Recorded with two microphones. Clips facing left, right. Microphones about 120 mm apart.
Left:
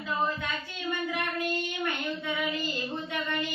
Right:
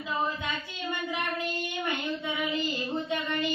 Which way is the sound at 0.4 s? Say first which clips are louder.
Even; 15° right (ahead or behind).